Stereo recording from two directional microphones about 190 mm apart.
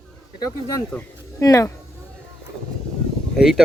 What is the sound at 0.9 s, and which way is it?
Speech, 15° left (ahead or behind).